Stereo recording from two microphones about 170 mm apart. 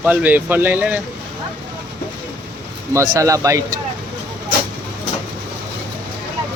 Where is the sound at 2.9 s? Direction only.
15° right (ahead or behind).